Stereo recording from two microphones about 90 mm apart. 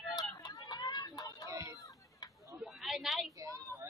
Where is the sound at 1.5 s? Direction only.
35° right (ahead or behind).